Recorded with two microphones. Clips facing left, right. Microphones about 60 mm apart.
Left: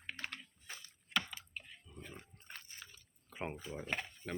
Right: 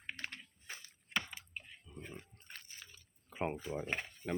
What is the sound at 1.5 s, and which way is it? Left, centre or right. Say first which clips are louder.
Drip: right 1 dB; right.